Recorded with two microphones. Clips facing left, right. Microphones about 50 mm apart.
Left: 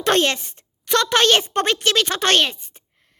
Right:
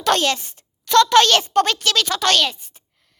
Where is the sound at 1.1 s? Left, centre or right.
Left.